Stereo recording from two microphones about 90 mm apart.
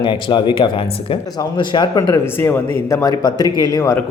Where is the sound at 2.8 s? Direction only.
35° left (ahead or behind).